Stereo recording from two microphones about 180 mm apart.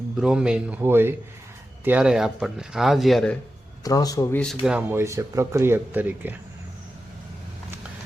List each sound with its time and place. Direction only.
0.2 s speech: 5° right (ahead or behind)
3.8 s speech: 20° left (ahead or behind)
4.6 s speech: 10° right (ahead or behind)